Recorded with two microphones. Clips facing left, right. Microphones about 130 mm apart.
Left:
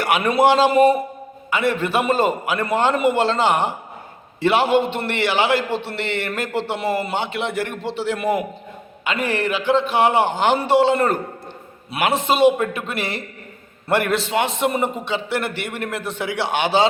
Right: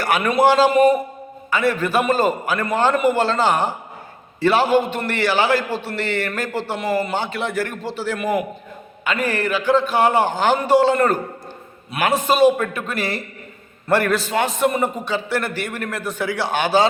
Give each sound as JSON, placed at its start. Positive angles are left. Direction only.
{"t": 0.0, "sound": "a man's voice", "side_deg": 25}